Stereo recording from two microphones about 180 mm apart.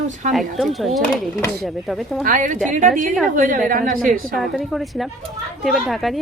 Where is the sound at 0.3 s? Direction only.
Centre (ahead or behind).